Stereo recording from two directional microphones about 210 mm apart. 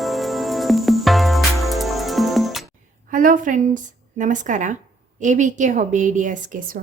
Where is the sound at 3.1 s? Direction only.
40° right (ahead or behind).